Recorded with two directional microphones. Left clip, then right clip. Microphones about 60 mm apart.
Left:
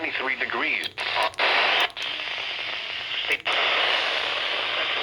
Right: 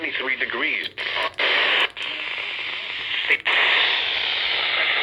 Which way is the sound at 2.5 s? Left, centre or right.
Left.